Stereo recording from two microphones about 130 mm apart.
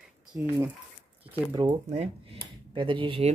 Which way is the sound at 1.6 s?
40° right (ahead or behind).